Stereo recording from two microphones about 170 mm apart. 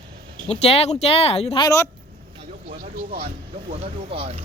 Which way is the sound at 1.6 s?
15° left (ahead or behind).